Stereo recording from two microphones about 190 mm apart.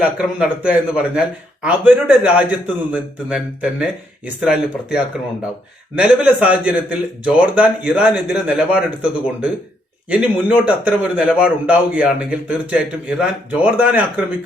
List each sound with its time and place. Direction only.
0.3 s a man's voice: 5° right (ahead or behind)